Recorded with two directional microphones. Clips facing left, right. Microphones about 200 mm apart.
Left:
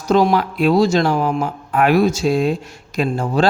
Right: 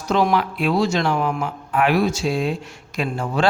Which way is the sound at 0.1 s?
40° left (ahead or behind).